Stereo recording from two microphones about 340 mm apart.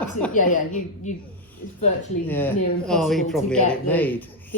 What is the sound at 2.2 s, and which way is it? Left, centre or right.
Speech, centre.